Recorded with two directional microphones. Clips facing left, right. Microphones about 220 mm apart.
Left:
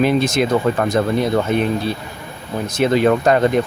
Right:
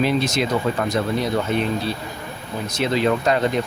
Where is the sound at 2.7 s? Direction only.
50° left (ahead or behind).